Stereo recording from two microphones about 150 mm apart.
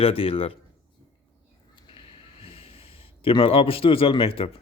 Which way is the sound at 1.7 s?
35° left (ahead or behind).